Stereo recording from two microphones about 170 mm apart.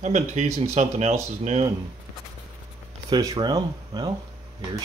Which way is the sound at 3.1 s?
20° right (ahead or behind).